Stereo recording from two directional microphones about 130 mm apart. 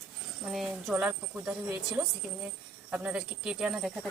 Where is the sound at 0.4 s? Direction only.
5° right (ahead or behind).